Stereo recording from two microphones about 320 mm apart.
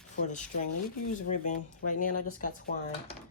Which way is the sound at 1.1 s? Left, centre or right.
Left.